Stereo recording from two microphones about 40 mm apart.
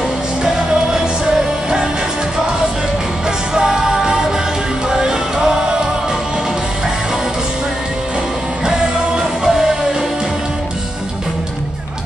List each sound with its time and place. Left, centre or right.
3.5 s music: centre
8.6 s music: centre